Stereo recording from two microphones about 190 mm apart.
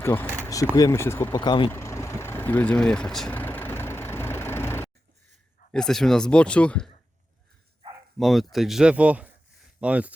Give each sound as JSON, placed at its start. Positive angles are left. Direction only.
{"t": 0.0, "sound": "speech", "side_deg": 15}
{"t": 1.7, "sound": "vehicle", "side_deg": 15}
{"t": 5.7, "sound": "speech", "side_deg": 0}
{"t": 8.2, "sound": "speech", "side_deg": 0}